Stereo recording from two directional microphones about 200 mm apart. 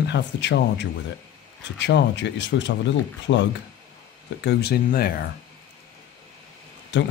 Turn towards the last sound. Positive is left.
turn(degrees=65)  # may be behind; listen again after turning